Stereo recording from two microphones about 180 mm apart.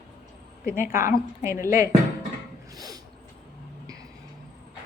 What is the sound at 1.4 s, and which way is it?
Speech, 15° right (ahead or behind).